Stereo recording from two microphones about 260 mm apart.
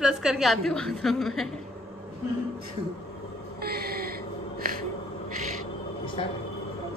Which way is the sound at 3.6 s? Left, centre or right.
Right.